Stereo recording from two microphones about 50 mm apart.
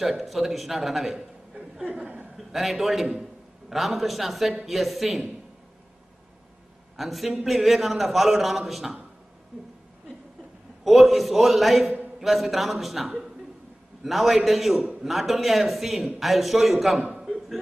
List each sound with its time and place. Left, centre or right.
0.0 s a man's voice: centre
1.9 s chuckle: right
2.3 s a man's voice: centre
7.0 s a man's voice: centre
9.5 s a sound: centre
10.8 s a man's voice: centre
14.8 s a man's voice: right
15.0 s a man's voice: centre
17.0 s a sound: centre